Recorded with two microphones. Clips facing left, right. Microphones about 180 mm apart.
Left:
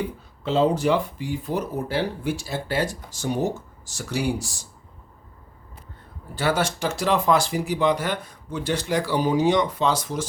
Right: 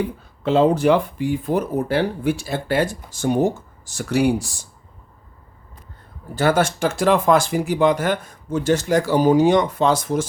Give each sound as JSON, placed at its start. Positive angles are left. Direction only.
{"t": 0.4, "sound": "speech", "side_deg": -60}
{"t": 6.3, "sound": "speech", "side_deg": -50}